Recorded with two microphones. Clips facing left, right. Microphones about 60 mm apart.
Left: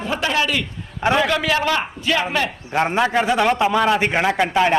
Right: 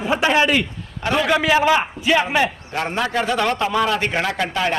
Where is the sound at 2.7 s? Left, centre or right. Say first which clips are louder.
Left 6 dB; left.